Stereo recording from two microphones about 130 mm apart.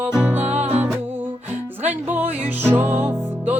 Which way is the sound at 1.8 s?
15° right (ahead or behind).